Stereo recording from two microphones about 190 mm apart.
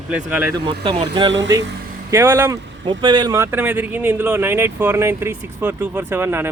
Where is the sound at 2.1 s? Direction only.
10° right (ahead or behind).